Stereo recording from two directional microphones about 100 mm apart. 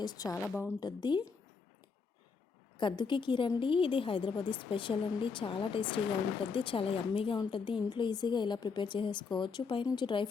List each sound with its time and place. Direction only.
0.0 s a woman's voice: 40° left (ahead or behind)
0.3 s a woman's voice: 20° left (ahead or behind)
0.8 s a woman's voice: 45° left (ahead or behind)
2.7 s a woman's voice: 50° left (ahead or behind)